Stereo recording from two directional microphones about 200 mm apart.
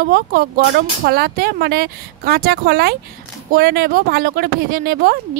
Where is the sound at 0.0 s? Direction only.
50° right (ahead or behind).